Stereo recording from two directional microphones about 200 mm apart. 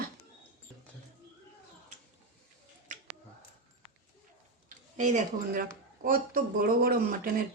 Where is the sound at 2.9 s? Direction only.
40° right (ahead or behind).